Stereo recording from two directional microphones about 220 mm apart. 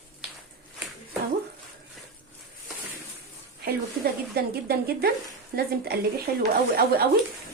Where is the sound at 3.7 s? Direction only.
45° right (ahead or behind).